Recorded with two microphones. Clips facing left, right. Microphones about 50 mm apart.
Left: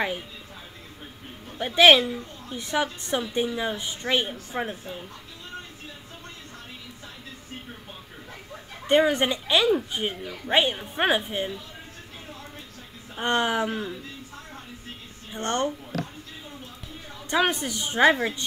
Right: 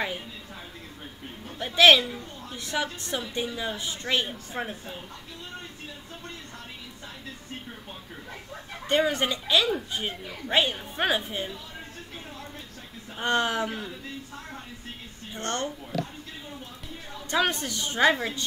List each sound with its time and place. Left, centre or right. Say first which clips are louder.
1.8 s a woman's voice: left 2 dB; centre
8.8 s speech: left 4 dB; left
9.7 s a woman's voice: left 5 dB; centre
13.2 s a woman's voice: left 2 dB; centre
15.3 s speech: left 4 dB; left
17.3 s a woman's voice: left 2 dB; centre